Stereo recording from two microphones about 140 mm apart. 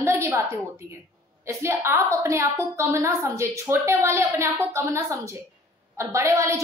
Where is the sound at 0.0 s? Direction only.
20° right (ahead or behind).